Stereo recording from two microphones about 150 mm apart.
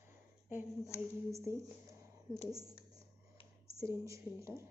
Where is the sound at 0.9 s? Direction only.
20° left (ahead or behind).